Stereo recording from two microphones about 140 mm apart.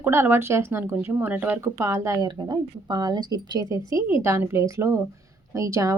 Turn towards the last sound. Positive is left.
turn(degrees=-25)  # may be behind; listen again after turning